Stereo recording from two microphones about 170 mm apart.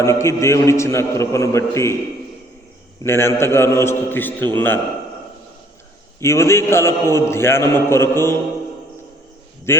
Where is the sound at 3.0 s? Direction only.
15° left (ahead or behind).